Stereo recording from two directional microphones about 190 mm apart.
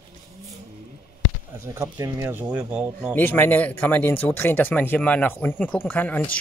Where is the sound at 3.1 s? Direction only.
10° left (ahead or behind).